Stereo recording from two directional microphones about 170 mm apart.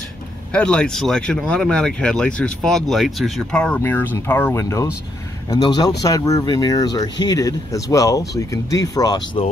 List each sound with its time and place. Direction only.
0.5 s speech: 5° left (ahead or behind); by 9.4 s 25° left (ahead or behind)